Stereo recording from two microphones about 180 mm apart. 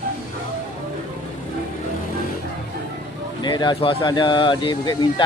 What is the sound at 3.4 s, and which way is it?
Speech, 25° left (ahead or behind).